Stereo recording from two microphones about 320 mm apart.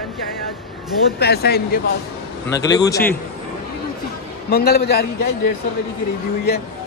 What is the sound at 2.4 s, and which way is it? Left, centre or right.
Speech, centre.